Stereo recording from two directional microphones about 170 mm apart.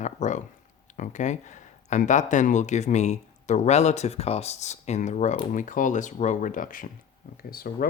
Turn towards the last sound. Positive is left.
turn(degrees=60)  # may be behind; listen again after turning